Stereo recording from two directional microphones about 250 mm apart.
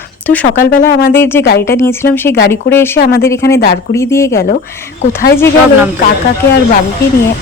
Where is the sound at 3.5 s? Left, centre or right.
Left.